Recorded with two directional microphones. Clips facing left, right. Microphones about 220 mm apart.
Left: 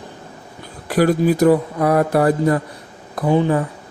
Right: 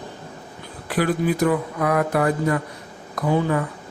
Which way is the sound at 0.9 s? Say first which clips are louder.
Left 6 dB; 40° left (ahead or behind).